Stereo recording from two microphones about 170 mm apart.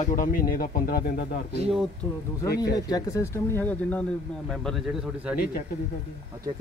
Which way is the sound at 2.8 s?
20° left (ahead or behind).